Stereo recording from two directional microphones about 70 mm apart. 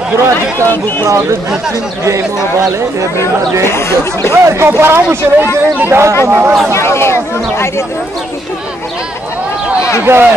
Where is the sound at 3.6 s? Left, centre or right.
Left.